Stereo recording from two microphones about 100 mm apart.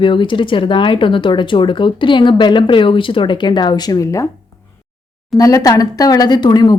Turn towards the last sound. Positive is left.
turn(degrees=45)  # may be behind; listen again after turning